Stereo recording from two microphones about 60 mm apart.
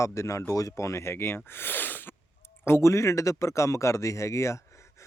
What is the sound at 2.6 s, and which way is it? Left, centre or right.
Speech, left.